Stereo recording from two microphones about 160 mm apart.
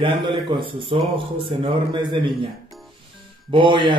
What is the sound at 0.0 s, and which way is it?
A man's voice, 30° right (ahead or behind).